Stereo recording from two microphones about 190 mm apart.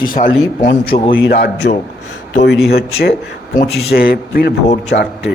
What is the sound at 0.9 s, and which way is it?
Speech, 30° left (ahead or behind).